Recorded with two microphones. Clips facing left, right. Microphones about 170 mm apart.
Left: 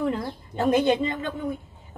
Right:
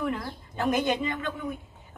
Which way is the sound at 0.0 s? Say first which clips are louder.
Left 4 dB; 30° left (ahead or behind).